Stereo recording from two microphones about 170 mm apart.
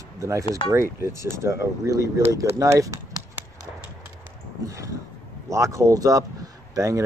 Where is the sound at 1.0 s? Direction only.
15° right (ahead or behind).